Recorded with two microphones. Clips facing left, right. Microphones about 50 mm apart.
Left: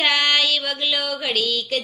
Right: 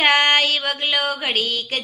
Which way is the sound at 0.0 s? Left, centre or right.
Right.